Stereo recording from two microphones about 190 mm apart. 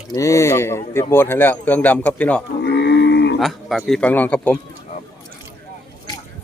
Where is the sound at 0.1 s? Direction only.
15° left (ahead or behind).